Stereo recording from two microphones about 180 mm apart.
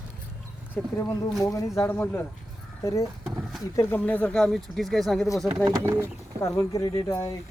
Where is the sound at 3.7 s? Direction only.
15° left (ahead or behind).